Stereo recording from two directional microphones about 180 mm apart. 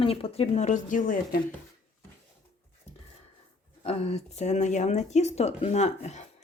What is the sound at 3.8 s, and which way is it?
Speech, 35° left (ahead or behind).